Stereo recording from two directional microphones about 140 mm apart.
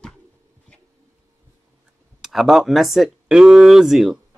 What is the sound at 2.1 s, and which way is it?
Speech, centre (ahead or behind).